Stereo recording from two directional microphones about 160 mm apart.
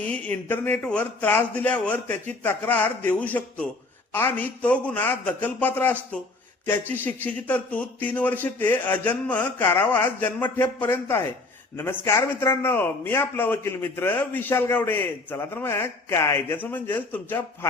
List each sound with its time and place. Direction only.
0.0 s speech: 10° left (ahead or behind)